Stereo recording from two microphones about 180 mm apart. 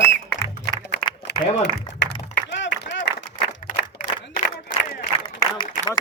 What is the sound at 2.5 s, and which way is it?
Applause, 90° left.